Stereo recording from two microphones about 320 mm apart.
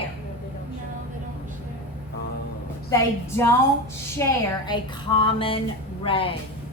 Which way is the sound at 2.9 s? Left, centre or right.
Centre.